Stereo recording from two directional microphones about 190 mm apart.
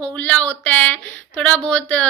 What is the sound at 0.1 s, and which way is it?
Speech, 10° left (ahead or behind).